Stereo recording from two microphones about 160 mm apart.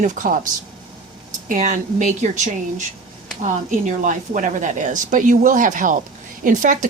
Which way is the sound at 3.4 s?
50° right (ahead or behind).